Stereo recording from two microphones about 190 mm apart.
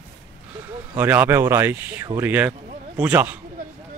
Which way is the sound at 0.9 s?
10° right (ahead or behind).